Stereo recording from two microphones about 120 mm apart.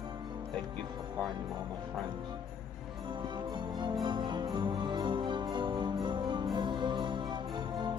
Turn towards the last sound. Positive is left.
turn(degrees=-40)  # may be behind; listen again after turning